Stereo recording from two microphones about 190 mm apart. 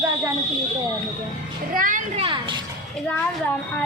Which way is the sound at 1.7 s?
45° right (ahead or behind).